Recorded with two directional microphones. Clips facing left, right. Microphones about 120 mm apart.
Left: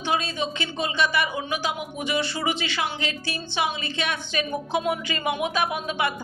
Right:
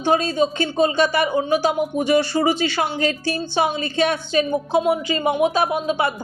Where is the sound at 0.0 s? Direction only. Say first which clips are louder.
Right 8 dB; 40° right (ahead or behind).